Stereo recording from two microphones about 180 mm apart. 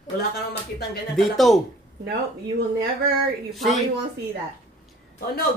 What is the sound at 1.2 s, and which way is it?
Speech, centre (ahead or behind).